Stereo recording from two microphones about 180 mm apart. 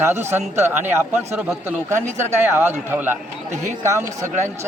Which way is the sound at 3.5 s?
40° right (ahead or behind).